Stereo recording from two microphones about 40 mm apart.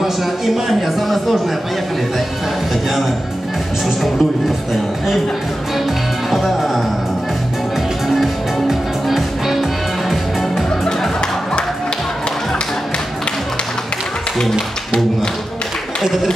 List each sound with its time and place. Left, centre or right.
0.0 s speech: centre
2.7 s speech: centre
6.3 s music: centre
8.1 s music: centre
10.9 s music: centre
16.0 s a sound: centre